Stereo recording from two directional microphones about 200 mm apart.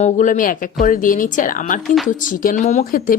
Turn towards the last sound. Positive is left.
turn(degrees=45)  # may be behind; listen again after turning